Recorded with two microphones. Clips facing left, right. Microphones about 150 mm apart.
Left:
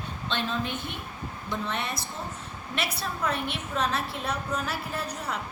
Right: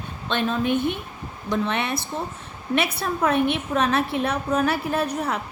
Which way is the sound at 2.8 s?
55° right (ahead or behind).